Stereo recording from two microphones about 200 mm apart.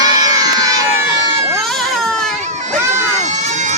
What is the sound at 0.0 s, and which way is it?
Crowd, 20° right (ahead or behind).